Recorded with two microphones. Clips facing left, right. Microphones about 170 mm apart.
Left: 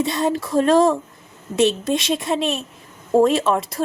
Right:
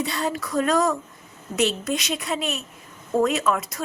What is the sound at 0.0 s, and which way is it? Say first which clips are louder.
Speech: left 6 dB; 20° left (ahead or behind).